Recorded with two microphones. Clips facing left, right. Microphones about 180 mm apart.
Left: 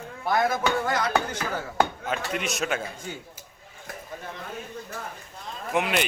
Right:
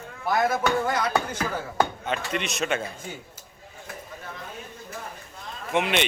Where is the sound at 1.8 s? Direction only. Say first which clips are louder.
Even; 5° left (ahead or behind).